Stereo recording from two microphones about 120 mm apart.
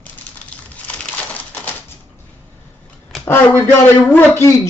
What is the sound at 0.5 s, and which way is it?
Crushing, 10° left (ahead or behind).